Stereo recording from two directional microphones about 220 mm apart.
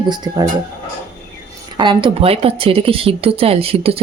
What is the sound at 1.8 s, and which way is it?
Speech, 20° right (ahead or behind).